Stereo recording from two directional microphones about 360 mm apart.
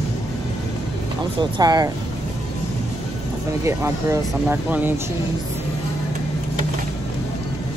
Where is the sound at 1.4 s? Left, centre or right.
Centre.